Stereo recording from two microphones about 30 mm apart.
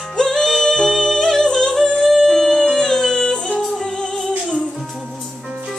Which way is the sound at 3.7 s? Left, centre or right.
Left.